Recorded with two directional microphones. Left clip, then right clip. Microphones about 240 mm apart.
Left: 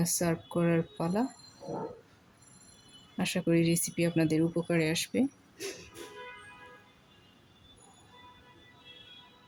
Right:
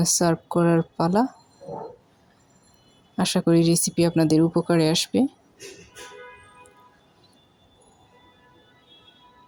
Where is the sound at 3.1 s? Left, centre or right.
Right.